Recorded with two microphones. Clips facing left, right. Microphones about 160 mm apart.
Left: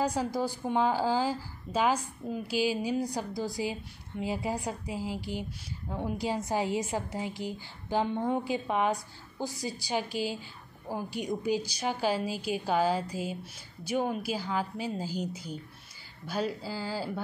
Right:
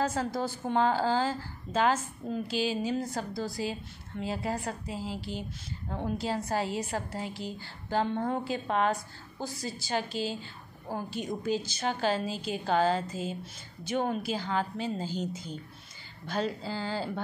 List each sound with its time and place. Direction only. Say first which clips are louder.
0.0 s a woman's voice: left 1 dB; 15° left (ahead or behind)